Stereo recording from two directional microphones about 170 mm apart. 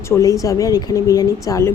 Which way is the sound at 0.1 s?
20° left (ahead or behind).